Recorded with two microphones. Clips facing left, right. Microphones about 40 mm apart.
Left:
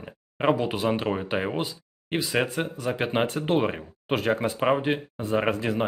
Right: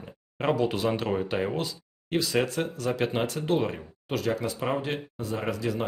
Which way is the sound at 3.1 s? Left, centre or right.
Left.